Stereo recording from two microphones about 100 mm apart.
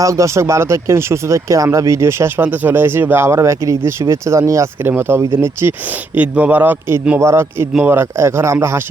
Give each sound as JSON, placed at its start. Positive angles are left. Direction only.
{"t": 0.0, "sound": "speech", "side_deg": -30}
{"t": 4.8, "sound": "a man's voice", "side_deg": -20}